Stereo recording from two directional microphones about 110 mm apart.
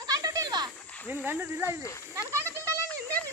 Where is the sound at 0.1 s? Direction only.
35° right (ahead or behind).